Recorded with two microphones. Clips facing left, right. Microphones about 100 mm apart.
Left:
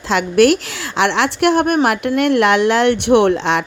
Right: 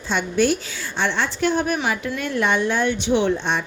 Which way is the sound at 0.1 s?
90° left.